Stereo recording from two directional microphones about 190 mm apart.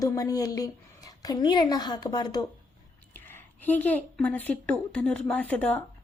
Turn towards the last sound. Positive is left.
turn(degrees=5)  # may be behind; listen again after turning